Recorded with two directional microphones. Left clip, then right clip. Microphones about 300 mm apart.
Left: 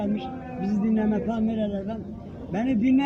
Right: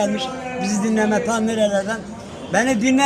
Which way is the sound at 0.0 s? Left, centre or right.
Centre.